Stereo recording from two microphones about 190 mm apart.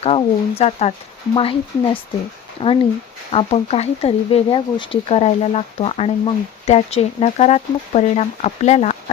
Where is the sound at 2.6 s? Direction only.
25° left (ahead or behind).